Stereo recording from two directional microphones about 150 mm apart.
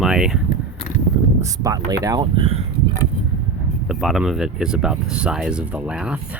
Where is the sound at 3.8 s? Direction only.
5° right (ahead or behind).